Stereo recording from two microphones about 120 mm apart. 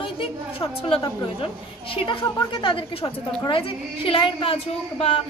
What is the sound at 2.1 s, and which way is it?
Speech, 45° left (ahead or behind).